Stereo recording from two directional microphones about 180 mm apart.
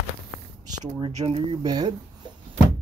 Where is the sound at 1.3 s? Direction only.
25° right (ahead or behind).